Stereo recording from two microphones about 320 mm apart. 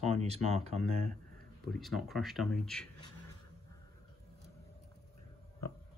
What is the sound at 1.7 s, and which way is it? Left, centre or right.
Speech, centre.